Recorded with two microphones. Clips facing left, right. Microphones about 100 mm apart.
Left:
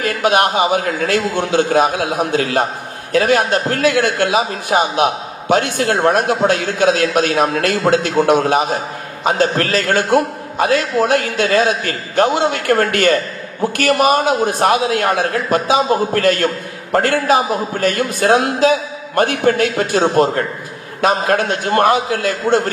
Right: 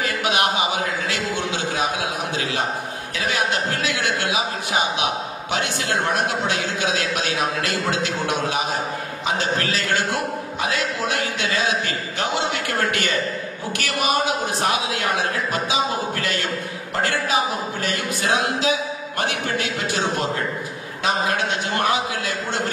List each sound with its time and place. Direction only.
0.0 s a man's voice: 50° left (ahead or behind)